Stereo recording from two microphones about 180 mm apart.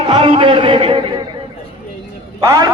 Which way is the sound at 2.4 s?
20° right (ahead or behind).